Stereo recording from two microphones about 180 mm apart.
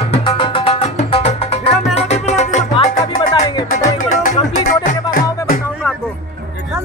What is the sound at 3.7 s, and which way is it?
Music, 50° left (ahead or behind).